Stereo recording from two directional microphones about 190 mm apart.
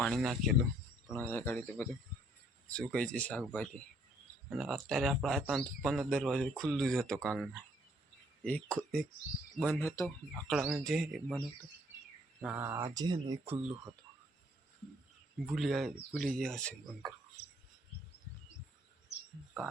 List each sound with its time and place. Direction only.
0.0 s speech: centre (ahead or behind)
1.1 s speech: 10° left (ahead or behind)
10.5 s speech: 5° right (ahead or behind)
12.4 s speech: 10° right (ahead or behind)
15.4 s speech: centre (ahead or behind)